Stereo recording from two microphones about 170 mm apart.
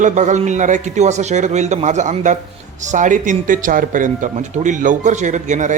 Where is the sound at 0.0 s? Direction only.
45° right (ahead or behind).